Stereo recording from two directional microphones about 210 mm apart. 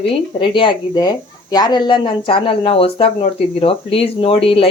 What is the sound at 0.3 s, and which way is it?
Speech, 25° left (ahead or behind).